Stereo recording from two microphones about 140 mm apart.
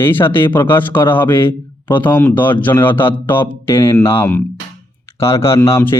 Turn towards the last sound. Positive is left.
turn(degrees=20)  # may be behind; listen again after turning